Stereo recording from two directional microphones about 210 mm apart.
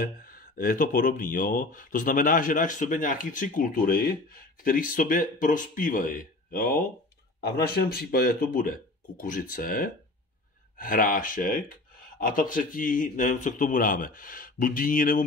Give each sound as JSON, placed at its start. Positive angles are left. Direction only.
{"t": 0.0, "sound": "speech", "side_deg": 45}